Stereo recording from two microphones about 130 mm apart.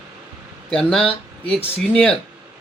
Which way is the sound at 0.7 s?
5° left (ahead or behind).